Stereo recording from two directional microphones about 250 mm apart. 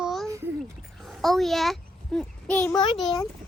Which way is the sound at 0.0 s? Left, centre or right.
Centre.